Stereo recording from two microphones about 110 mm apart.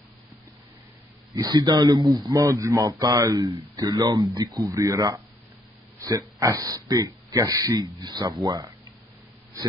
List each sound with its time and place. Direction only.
1.3 s speech: 35° right (ahead or behind)